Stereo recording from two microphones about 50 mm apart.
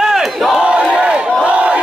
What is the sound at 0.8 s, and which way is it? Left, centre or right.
Battle cry, right.